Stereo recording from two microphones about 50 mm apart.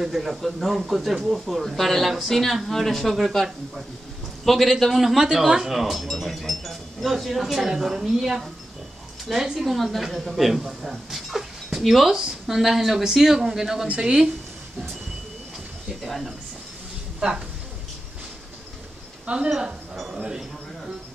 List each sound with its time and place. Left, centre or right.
0.0 s speech: centre
4.5 s speech: centre
13.8 s speech: right
16.0 s speech: centre
19.2 s speech: right